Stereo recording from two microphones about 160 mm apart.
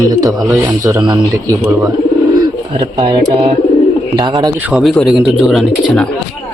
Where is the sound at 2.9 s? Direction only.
30° right (ahead or behind).